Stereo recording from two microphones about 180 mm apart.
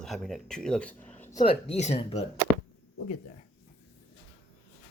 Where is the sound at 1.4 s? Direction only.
35° left (ahead or behind).